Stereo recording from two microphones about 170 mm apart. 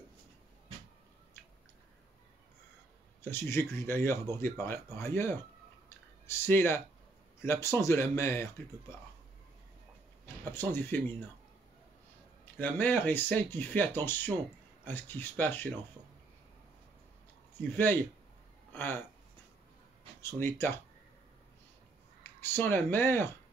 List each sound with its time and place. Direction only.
3.2 s speech: 15° left (ahead or behind)
5.9 s clicking: 15° left (ahead or behind)
7.4 s speech: 15° left (ahead or behind)
10.2 s speech: 15° left (ahead or behind)
12.5 s speech: 10° left (ahead or behind)
17.6 s speech: 10° left (ahead or behind)
20.2 s speech: 15° left (ahead or behind)
22.4 s speech: 10° left (ahead or behind)